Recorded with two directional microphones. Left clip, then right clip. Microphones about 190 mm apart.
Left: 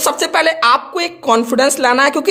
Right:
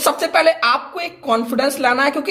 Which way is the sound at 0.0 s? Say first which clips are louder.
Left 1 dB; 35° left (ahead or behind).